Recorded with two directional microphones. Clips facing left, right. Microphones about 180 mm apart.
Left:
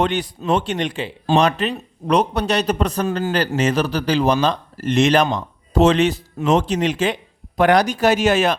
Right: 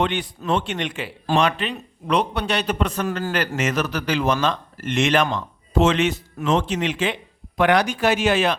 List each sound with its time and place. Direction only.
0.0 s speech: 40° left (ahead or behind)
1.4 s speech: 40° left (ahead or behind)